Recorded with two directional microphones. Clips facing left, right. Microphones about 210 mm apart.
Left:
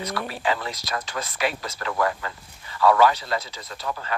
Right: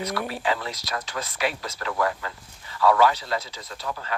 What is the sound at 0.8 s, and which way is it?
Speech, 50° left (ahead or behind).